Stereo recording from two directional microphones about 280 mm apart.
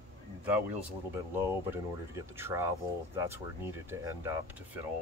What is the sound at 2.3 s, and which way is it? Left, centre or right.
Speech, centre.